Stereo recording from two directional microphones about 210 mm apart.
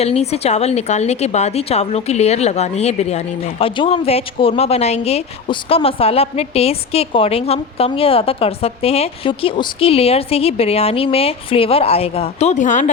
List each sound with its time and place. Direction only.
0.0 s a woman's voice: 30° left (ahead or behind)